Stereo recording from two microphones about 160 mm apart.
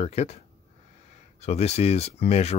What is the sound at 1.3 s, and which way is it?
Speech, 40° left (ahead or behind).